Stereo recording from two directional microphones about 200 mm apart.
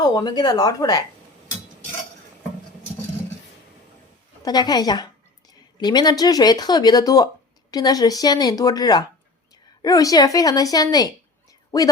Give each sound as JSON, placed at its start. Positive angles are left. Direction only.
{"t": 0.0, "sound": "speech", "side_deg": 20}
{"t": 4.4, "sound": "speech", "side_deg": 20}